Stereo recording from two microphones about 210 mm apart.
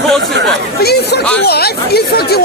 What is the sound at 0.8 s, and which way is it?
Speech, 50° left (ahead or behind).